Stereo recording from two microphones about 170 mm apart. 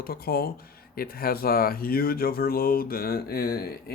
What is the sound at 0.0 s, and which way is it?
Speech, 60° left (ahead or behind).